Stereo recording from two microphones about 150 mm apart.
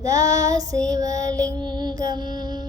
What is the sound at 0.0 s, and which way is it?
Child singing, 25° right (ahead or behind).